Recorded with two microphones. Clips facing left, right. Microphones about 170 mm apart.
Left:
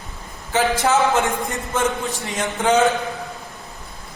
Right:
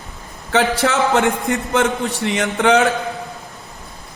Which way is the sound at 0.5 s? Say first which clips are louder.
Right 1 dB; 70° right (ahead or behind).